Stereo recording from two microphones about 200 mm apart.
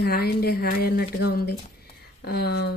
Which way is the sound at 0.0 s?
50° left (ahead or behind).